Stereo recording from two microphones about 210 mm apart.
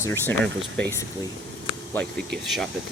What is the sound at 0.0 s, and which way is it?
Speech, 15° left (ahead or behind).